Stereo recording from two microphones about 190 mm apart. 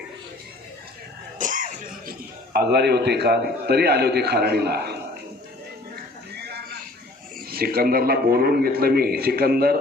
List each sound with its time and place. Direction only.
1.4 s speech: 45° right (ahead or behind)
6.3 s a sound: 60° right (ahead or behind)
7.5 s a man's voice: 55° right (ahead or behind)